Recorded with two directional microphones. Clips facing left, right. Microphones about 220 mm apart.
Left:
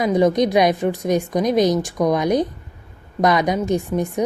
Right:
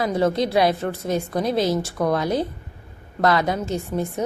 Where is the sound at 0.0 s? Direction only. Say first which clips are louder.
Left 4 dB; 15° left (ahead or behind).